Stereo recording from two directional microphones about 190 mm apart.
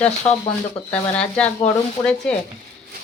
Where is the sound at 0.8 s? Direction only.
5° left (ahead or behind).